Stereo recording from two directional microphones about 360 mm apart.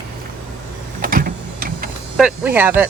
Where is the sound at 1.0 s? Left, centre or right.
Right.